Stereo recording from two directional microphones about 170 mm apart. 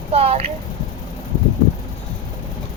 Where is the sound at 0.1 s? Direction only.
35° right (ahead or behind).